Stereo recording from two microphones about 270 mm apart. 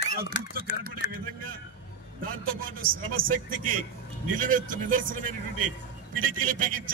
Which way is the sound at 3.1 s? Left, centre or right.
Right.